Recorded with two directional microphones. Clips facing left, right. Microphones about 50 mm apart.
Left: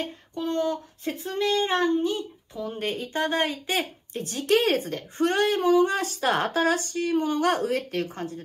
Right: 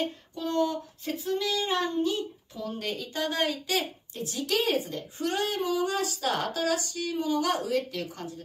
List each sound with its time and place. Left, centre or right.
0.4 s speech: left